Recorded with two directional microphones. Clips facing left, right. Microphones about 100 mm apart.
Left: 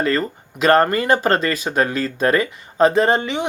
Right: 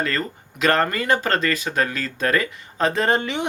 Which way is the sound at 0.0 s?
30° left (ahead or behind).